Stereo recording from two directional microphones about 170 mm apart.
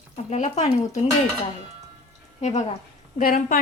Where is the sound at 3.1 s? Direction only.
55° left (ahead or behind).